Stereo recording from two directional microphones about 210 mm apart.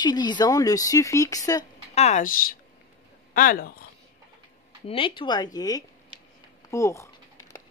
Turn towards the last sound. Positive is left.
turn(degrees=15)  # may be behind; listen again after turning